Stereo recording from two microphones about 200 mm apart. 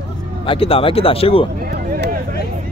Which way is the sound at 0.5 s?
30° left (ahead or behind).